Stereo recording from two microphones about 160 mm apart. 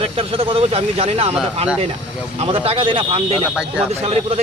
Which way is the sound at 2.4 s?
35° right (ahead or behind).